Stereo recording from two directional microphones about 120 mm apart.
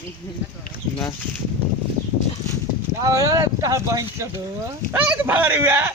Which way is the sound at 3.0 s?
30° right (ahead or behind).